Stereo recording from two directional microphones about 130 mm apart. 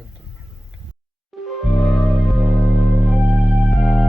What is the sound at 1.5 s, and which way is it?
Music, centre (ahead or behind).